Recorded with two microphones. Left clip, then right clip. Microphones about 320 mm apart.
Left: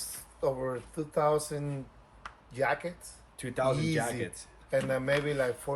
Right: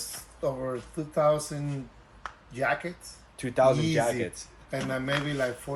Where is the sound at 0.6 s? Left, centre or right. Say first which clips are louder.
Right 1 dB; centre.